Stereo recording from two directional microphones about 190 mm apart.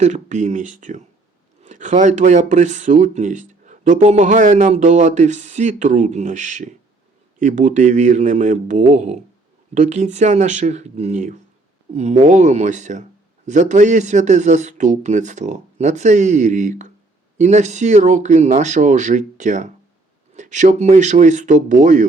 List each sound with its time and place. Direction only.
0.0 s speech: 40° right (ahead or behind)